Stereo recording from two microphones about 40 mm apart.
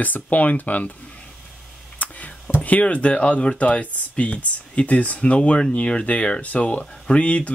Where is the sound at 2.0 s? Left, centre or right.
Left.